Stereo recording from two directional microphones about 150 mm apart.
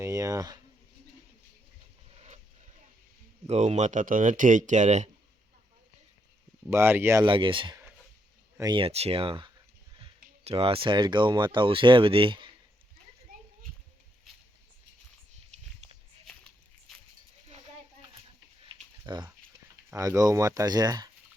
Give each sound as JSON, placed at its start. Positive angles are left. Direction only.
{"t": 0.0, "sound": "speech", "side_deg": -20}
{"t": 2.1, "sound": "a sound", "side_deg": -45}
{"t": 3.4, "sound": "speech", "side_deg": -45}
{"t": 6.7, "sound": "speech", "side_deg": -15}
{"t": 7.3, "sound": "speech", "side_deg": -35}
{"t": 13.3, "sound": "children playing", "side_deg": -75}
{"t": 18.6, "sound": "typing", "side_deg": -30}
{"t": 19.9, "sound": "speech", "side_deg": -20}